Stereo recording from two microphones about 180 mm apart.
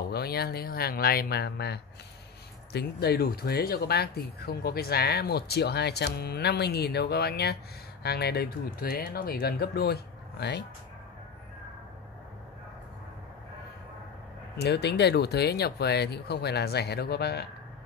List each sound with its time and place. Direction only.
0.1 s speech: 60° left (ahead or behind)
14.6 s speech: 65° left (ahead or behind)